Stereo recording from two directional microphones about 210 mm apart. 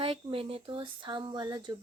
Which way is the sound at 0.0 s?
25° right (ahead or behind).